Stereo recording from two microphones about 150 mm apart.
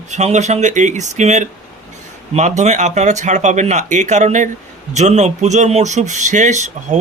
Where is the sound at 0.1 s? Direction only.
50° right (ahead or behind).